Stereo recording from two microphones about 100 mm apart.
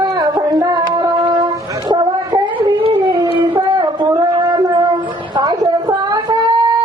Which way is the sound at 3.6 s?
45° right (ahead or behind).